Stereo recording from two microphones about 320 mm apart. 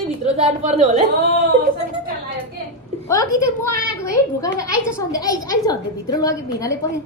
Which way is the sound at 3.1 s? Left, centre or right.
Centre.